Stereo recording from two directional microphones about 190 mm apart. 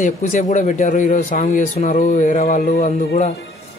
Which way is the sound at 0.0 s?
40° left (ahead or behind).